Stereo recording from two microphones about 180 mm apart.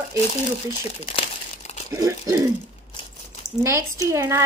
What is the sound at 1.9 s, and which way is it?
Speech, 15° right (ahead or behind).